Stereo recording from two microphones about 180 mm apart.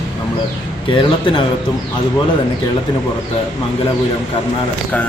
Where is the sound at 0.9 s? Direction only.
30° left (ahead or behind).